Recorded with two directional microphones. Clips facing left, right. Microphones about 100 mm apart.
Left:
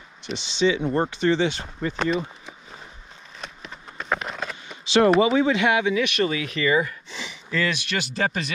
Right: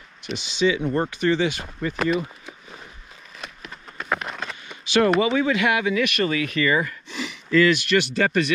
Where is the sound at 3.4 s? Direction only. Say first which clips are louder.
Even; centre (ahead or behind).